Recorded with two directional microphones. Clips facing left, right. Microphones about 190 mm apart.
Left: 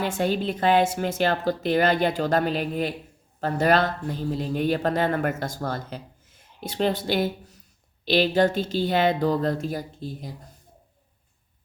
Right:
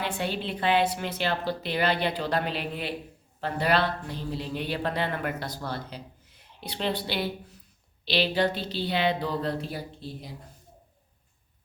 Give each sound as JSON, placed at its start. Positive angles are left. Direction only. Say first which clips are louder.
{"t": 0.0, "sound": "a man's voice", "louder": "left 6 dB", "side_deg": 45}